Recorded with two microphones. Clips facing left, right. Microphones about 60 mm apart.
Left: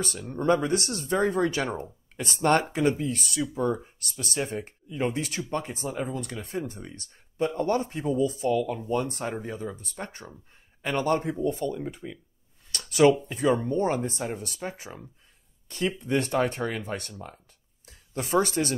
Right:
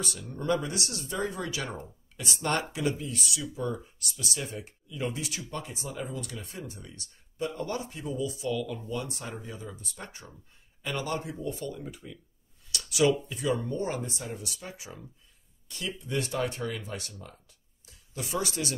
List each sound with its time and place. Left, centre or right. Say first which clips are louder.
0.0 s speech: left 6 dB; left